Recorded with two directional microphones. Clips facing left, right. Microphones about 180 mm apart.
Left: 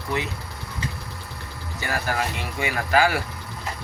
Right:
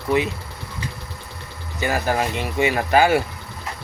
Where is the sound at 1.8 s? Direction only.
20° right (ahead or behind).